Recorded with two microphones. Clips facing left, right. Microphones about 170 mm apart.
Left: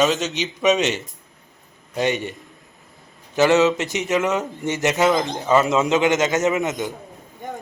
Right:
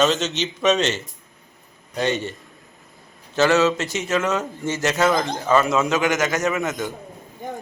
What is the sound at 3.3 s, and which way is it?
Speech, 20° left (ahead or behind).